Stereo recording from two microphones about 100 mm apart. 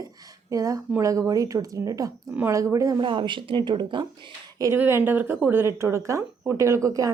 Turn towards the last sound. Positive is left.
turn(degrees=-30)  # may be behind; listen again after turning